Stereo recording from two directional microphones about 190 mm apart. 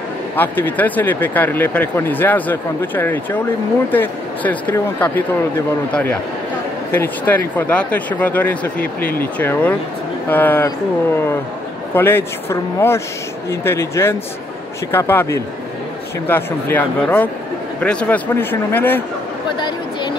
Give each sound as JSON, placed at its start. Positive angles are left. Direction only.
{"t": 0.4, "sound": "a man's voice", "side_deg": 10}
{"t": 11.9, "sound": "speech", "side_deg": 10}
{"t": 19.5, "sound": "a sound", "side_deg": 25}